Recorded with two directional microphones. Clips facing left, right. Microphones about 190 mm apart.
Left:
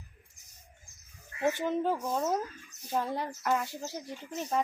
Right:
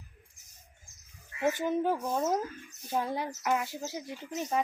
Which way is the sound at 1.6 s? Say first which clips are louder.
Right 1 dB; 15° right (ahead or behind).